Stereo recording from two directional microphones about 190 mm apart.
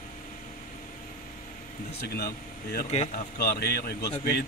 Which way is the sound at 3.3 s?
55° left (ahead or behind).